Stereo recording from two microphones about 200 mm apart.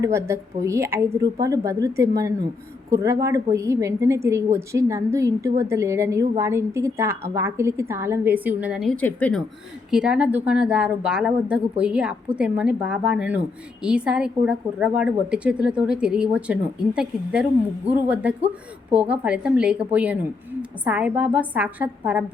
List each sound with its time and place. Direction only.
0.0 s a woman's voice: 15° right (ahead or behind); by 9.4 s 5° left (ahead or behind)
9.9 s a woman's voice: 5° right (ahead or behind)